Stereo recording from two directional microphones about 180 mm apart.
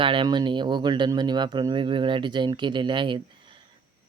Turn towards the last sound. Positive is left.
turn(degrees=-25)  # may be behind; listen again after turning